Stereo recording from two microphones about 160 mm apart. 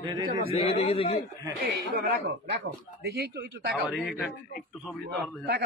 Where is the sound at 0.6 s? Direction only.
40° left (ahead or behind).